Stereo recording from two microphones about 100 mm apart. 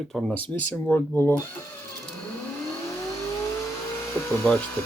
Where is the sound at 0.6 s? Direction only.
15° left (ahead or behind).